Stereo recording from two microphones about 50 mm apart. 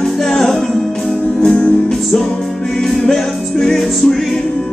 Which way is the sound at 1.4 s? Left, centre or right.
Left.